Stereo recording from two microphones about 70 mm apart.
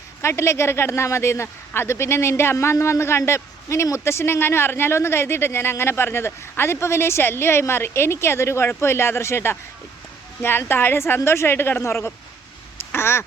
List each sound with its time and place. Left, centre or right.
0.2 s speech: left
12.9 s quack: left